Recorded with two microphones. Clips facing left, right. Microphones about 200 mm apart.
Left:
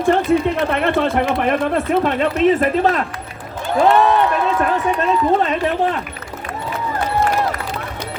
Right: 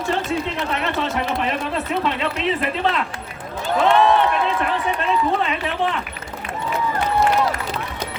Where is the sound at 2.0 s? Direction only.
50° left (ahead or behind).